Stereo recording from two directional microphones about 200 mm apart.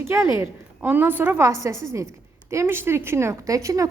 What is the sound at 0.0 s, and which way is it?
A woman's voice, 10° right (ahead or behind).